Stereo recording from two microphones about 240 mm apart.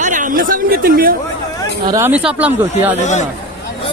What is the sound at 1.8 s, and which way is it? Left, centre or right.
Speech, centre.